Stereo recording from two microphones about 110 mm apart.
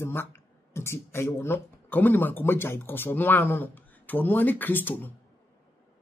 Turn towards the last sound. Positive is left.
turn(degrees=15)  # may be behind; listen again after turning